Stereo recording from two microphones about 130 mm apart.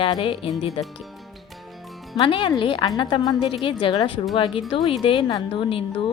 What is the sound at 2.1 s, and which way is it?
A woman's voice, 40° left (ahead or behind).